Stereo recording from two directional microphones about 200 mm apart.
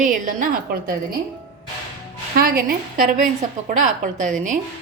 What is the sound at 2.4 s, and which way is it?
A woman's voice, 45° right (ahead or behind).